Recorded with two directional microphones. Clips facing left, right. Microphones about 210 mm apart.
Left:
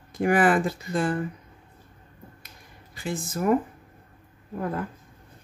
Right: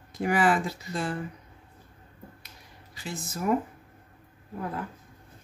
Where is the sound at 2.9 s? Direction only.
55° left (ahead or behind).